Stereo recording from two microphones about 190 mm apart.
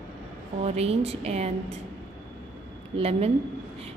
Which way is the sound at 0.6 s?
35° right (ahead or behind).